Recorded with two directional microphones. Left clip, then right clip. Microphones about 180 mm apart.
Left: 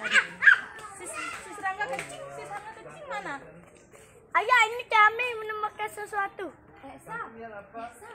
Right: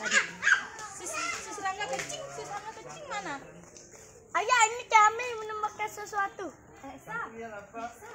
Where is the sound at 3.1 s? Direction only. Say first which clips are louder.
Left 2 dB; 15° right (ahead or behind).